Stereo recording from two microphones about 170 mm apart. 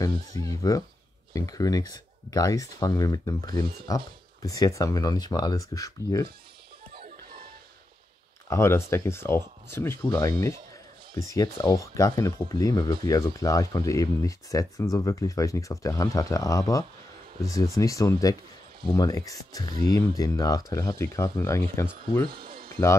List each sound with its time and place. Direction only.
0.0 s speech: 20° left (ahead or behind)
6.9 s music: 65° right (ahead or behind)
8.5 s speech: 15° left (ahead or behind)
11.1 s speech: 20° left (ahead or behind)
22.3 s a sound: 65° right (ahead or behind)